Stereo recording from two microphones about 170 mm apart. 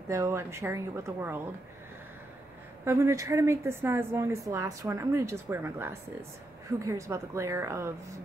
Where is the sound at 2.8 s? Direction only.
15° right (ahead or behind).